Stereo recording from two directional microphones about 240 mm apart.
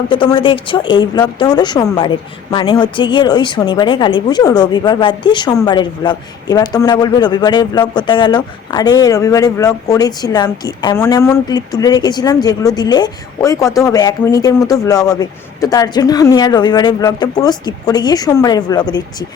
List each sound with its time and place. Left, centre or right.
0.1 s a woman's voice: left